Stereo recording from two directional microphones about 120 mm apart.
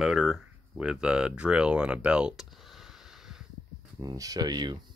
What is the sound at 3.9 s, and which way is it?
Speech, 30° right (ahead or behind).